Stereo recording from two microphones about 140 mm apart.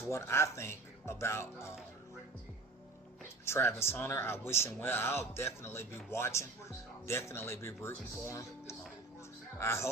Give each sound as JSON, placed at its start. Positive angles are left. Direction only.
{"t": 0.1, "sound": "speech", "side_deg": 20}
{"t": 3.4, "sound": "speech", "side_deg": 20}